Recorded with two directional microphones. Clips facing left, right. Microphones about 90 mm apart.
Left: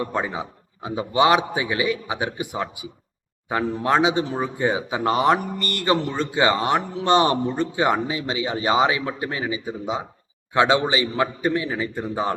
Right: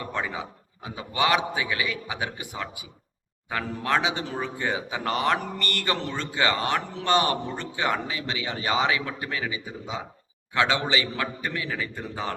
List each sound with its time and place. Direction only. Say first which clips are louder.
0.0 s speech: left 5 dB; 25° left (ahead or behind)